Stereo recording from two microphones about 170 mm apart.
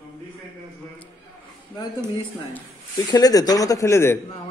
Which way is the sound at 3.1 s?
20° left (ahead or behind).